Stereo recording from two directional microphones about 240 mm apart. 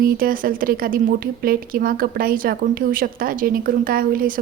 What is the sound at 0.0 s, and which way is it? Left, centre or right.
Speech, right.